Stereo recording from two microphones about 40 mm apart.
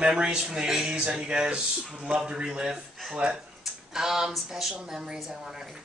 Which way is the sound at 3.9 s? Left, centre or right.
Centre.